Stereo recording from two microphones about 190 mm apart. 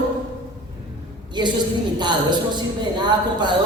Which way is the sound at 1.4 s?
25° right (ahead or behind).